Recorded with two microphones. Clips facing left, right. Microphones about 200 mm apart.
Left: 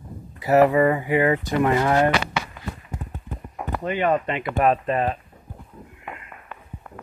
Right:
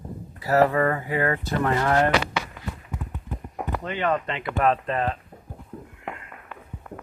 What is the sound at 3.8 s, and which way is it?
Speech, 15° left (ahead or behind).